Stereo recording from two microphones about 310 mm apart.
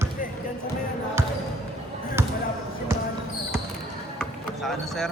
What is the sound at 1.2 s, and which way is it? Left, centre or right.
Basketball bounce, centre.